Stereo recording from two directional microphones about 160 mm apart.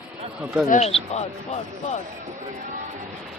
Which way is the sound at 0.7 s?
45° left (ahead or behind).